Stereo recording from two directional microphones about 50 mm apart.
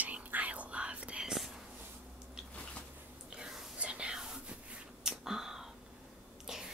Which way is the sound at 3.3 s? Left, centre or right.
Centre.